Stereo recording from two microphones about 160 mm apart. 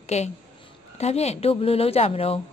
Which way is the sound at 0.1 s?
45° left (ahead or behind).